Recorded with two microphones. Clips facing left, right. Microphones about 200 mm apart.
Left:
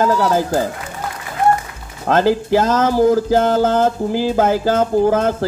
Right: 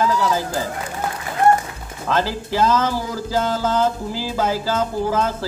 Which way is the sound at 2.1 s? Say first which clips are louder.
Left 8 dB; 50° left (ahead or behind).